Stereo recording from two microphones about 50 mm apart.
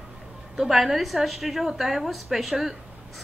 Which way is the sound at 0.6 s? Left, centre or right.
Centre.